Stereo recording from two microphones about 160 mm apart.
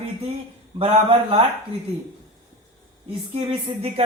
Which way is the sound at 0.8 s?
35° right (ahead or behind).